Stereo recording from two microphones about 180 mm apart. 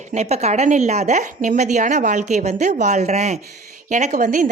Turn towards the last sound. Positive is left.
turn(degrees=-45)  # may be behind; listen again after turning